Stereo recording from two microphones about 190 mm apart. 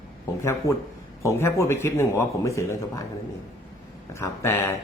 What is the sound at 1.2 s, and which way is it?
Speech, 15° left (ahead or behind).